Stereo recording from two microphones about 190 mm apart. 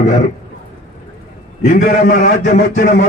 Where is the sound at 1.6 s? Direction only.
45° left (ahead or behind).